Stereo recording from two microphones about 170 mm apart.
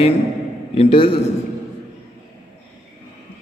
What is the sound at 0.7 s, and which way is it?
Speech, 35° left (ahead or behind).